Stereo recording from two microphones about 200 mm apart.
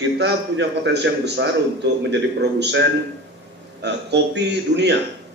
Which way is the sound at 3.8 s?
60° right (ahead or behind).